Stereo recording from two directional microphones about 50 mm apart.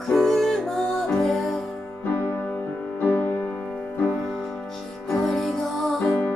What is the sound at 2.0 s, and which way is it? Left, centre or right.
Music, left.